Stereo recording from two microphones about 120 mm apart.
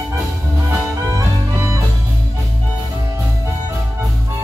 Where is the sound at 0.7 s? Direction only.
25° right (ahead or behind).